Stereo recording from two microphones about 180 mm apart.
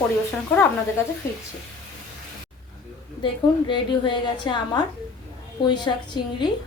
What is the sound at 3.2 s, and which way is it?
A woman's voice, 25° left (ahead or behind).